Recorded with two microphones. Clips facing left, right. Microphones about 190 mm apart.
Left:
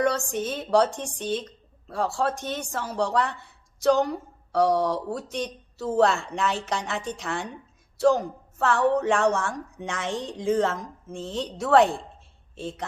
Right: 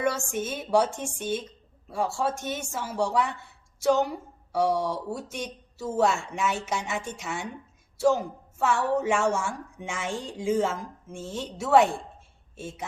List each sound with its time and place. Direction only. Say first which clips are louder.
0.3 s a woman's voice: left 2 dB; 5° right (ahead or behind)
4.7 s speech: left 4 dB; 65° left (ahead or behind)
5.1 s a woman's voice: left 4 dB; 5° right (ahead or behind)